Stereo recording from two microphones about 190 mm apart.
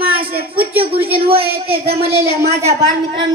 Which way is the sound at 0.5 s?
10° right (ahead or behind).